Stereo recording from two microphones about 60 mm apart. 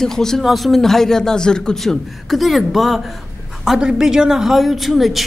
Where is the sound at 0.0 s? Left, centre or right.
Centre.